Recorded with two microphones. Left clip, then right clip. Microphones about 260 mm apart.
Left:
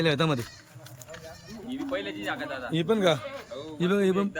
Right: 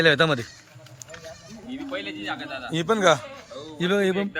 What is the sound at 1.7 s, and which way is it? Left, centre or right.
A man's voice, centre.